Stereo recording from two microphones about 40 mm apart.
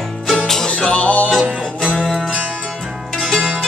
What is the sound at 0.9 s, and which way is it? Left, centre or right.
Music, left.